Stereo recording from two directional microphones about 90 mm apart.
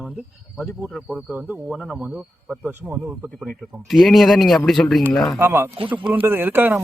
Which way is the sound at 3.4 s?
Centre (ahead or behind).